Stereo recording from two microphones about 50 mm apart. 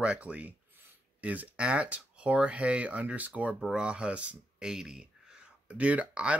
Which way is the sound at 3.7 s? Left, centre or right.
Centre.